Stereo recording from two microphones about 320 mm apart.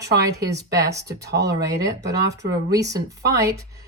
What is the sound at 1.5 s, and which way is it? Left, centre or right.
Speech, centre.